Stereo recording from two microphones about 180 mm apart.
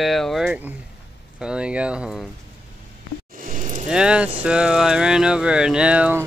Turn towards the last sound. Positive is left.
turn(degrees=-10)  # may be behind; listen again after turning